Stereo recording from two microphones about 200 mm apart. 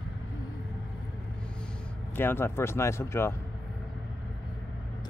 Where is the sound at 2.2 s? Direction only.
10° left (ahead or behind).